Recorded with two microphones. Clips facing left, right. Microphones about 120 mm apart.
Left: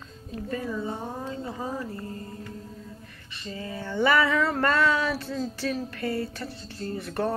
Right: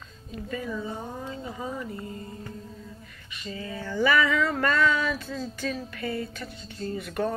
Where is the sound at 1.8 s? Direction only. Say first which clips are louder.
Left 1 dB; 15° right (ahead or behind).